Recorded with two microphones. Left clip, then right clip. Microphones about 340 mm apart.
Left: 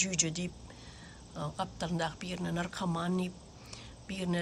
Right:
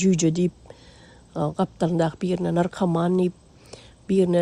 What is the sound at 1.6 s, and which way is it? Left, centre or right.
A woman's voice, centre.